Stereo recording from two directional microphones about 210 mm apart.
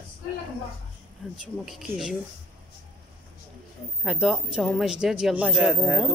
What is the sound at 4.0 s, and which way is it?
Speech, centre (ahead or behind).